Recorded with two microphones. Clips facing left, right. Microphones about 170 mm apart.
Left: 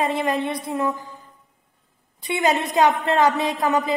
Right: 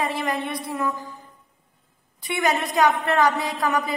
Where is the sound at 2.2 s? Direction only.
25° left (ahead or behind).